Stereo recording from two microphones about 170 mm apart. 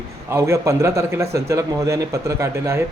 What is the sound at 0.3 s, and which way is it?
A man's voice, 15° right (ahead or behind).